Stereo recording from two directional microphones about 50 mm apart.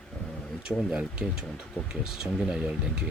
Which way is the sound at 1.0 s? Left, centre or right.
Centre.